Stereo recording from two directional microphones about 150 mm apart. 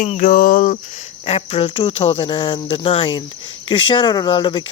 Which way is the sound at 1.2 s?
40° left (ahead or behind).